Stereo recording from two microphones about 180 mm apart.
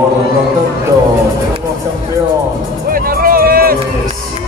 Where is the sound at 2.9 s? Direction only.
55° right (ahead or behind).